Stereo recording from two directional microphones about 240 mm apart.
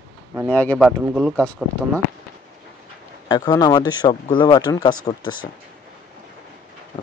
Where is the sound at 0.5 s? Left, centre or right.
Centre.